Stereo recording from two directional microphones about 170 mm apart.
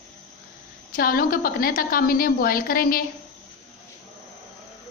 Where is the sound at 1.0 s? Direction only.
60° left (ahead or behind).